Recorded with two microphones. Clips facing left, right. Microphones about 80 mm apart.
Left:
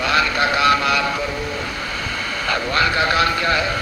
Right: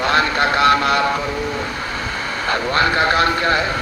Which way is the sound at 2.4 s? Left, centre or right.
Right.